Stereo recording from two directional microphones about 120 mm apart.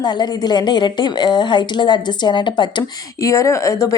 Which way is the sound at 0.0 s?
35° left (ahead or behind).